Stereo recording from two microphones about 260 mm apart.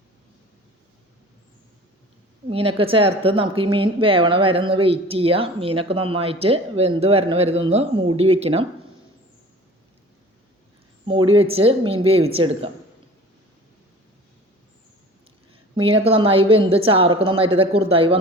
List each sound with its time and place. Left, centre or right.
2.5 s a woman's voice: right
11.1 s a woman's voice: right
15.7 s a woman's voice: centre